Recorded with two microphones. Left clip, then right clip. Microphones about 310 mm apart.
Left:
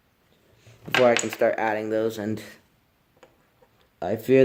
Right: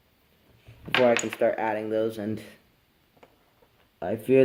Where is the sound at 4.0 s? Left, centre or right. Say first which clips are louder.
Left 2 dB; centre.